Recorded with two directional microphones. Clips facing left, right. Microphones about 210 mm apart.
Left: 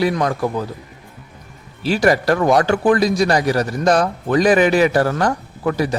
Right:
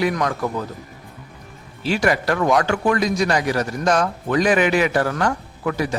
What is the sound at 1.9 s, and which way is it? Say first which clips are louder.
A man's voice: left 4 dB; 40° left (ahead or behind).